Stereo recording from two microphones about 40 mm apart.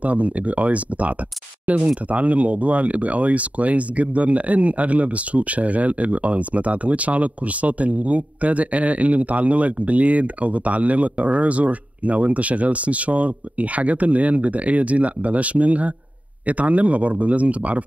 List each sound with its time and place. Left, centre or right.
0.0 s speech: right